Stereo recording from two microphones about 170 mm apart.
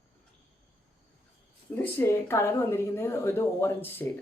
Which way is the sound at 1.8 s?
15° left (ahead or behind).